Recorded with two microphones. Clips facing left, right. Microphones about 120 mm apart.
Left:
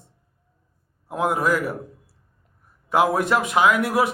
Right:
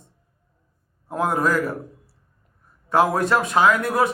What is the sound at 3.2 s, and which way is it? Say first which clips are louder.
Speech: right 1 dB; 15° left (ahead or behind).